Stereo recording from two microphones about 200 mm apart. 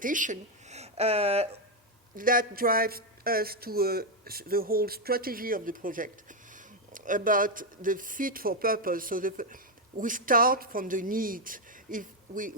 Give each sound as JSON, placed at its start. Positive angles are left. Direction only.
{"t": 0.0, "sound": "speech", "side_deg": -40}
{"t": 2.1, "sound": "speech", "side_deg": -45}